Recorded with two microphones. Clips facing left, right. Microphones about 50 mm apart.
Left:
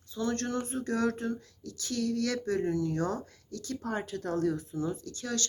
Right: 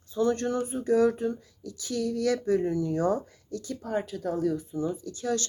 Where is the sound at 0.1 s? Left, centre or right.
Right.